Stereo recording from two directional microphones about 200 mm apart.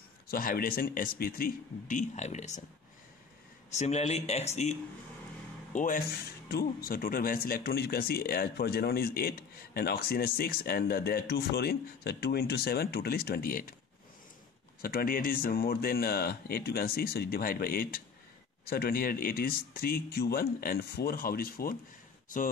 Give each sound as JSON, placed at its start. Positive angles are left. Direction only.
{"t": 0.3, "sound": "speech", "side_deg": 45}
{"t": 3.7, "sound": "speech", "side_deg": 35}
{"t": 14.8, "sound": "speech", "side_deg": 50}